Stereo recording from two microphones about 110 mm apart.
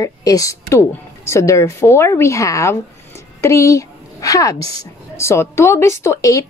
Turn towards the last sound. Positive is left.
turn(degrees=30)  # may be behind; listen again after turning